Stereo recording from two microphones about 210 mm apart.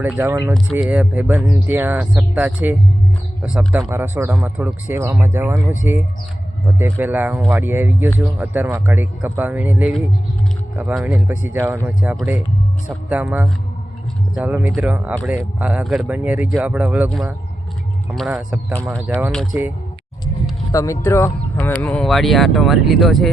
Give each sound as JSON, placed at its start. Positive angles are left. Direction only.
{"t": 0.0, "sound": "speech", "side_deg": -10}
{"t": 6.7, "sound": "speech", "side_deg": -10}
{"t": 20.7, "sound": "speech", "side_deg": 15}